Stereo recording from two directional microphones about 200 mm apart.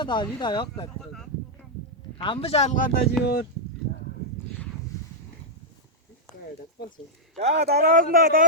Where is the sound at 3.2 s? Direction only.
55° left (ahead or behind).